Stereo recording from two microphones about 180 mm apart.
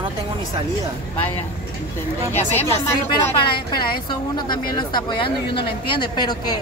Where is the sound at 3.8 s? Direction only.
25° left (ahead or behind).